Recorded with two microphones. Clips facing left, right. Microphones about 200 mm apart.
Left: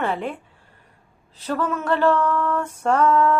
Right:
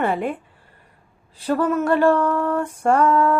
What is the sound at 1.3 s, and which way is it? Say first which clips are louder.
A woman's voice: right 5 dB; 10° right (ahead or behind).